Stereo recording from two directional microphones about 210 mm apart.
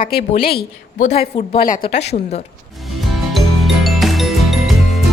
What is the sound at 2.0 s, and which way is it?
Speech, 30° left (ahead or behind).